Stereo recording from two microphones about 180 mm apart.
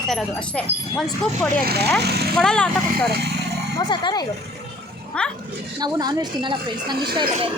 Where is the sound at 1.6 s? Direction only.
60° right (ahead or behind).